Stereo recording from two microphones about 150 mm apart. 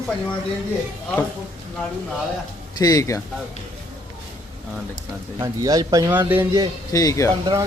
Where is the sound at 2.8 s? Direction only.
25° left (ahead or behind).